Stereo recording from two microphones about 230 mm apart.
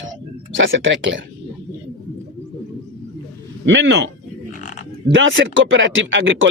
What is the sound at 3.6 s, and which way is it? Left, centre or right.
Speech, right.